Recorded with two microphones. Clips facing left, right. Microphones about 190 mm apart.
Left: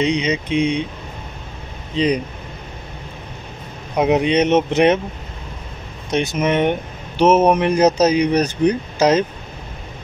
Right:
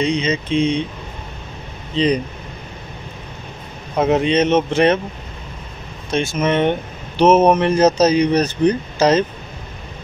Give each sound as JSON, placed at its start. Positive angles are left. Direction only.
{"t": 0.0, "sound": "speech", "side_deg": 15}
{"t": 2.0, "sound": "speech", "side_deg": 10}
{"t": 3.9, "sound": "speech", "side_deg": 15}
{"t": 6.0, "sound": "speech", "side_deg": 20}